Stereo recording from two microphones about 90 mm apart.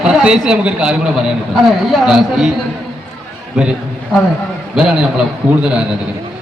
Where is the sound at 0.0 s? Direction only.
10° right (ahead or behind).